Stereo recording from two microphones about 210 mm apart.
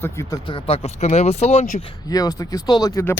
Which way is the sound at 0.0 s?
15° left (ahead or behind).